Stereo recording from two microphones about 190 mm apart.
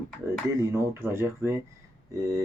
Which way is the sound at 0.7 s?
10° right (ahead or behind).